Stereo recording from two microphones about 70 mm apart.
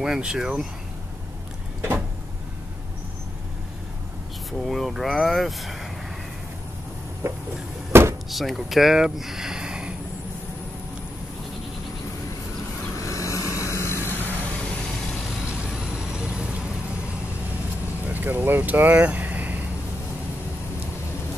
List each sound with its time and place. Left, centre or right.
0.0 s speech: centre
4.5 s speech: centre
7.2 s vehicle: right
8.3 s speech: centre
12.9 s vehicle: left
15.4 s vehicle: centre
18.0 s speech: right